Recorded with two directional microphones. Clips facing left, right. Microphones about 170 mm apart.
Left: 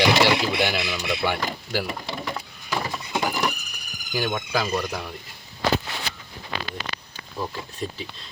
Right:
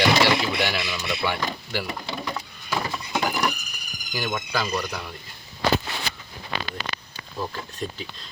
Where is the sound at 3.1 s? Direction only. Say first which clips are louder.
Even; 10° left (ahead or behind).